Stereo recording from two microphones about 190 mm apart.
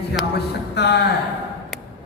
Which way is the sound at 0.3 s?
60° left (ahead or behind).